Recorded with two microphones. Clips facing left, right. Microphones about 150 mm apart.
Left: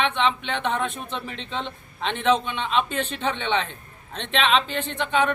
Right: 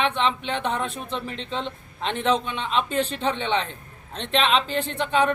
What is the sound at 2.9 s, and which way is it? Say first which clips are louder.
Speech: right 2 dB; 35° right (ahead or behind).